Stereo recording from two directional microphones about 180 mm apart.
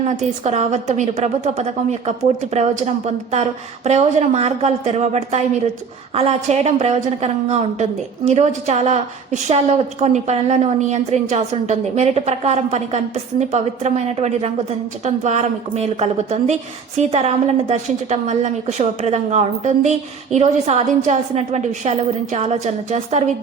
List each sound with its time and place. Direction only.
0.2 s a woman's voice: 40° right (ahead or behind)